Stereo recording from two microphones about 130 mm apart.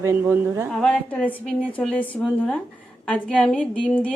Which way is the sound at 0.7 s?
5° left (ahead or behind).